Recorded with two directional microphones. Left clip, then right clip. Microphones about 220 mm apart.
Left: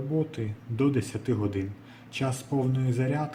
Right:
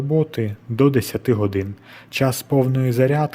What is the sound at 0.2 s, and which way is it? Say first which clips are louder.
Speech: right 9 dB; 45° right (ahead or behind).